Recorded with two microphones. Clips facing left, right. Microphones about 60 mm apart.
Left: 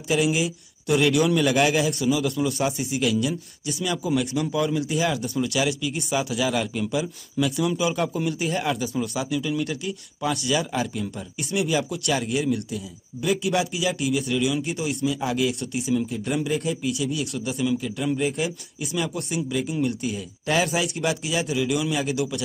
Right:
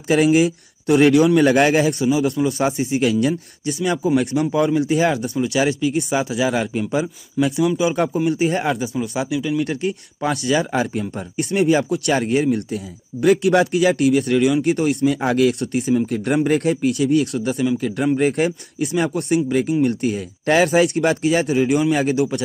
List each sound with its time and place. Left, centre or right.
0.1 s speech: right
2.0 s a man's voice: right
2.2 s speech: right
9.7 s speech: right
10.7 s speech: right